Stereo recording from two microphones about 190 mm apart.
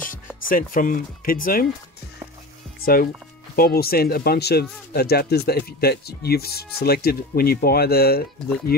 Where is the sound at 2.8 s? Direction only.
50° left (ahead or behind).